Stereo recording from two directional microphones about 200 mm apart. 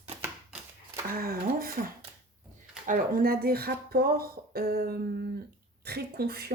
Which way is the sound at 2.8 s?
45° right (ahead or behind).